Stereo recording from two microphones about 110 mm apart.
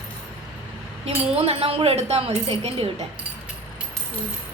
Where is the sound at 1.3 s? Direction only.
65° right (ahead or behind).